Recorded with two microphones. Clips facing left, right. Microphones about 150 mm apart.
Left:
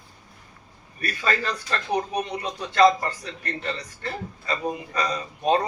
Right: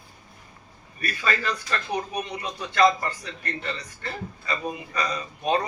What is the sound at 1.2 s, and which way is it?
Speech, 35° left (ahead or behind).